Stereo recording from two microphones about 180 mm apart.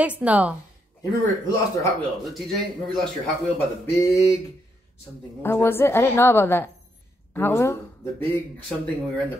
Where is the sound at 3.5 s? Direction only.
15° left (ahead or behind).